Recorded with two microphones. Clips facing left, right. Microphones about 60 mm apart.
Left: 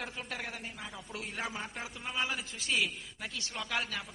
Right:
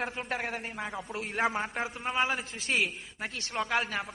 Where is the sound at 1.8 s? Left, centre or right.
Right.